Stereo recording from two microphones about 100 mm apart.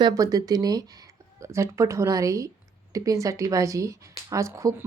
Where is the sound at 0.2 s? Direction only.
40° right (ahead or behind).